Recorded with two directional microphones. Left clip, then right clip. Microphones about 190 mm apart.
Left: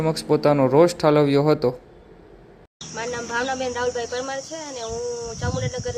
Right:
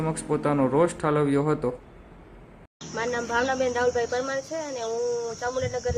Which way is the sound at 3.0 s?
Centre (ahead or behind).